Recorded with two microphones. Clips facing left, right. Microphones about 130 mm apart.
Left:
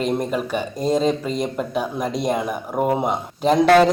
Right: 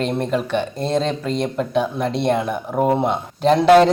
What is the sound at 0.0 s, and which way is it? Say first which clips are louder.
A man's voice: right 1 dB; 5° left (ahead or behind).